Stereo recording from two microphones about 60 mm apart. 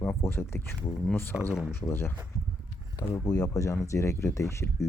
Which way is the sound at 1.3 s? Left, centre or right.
Centre.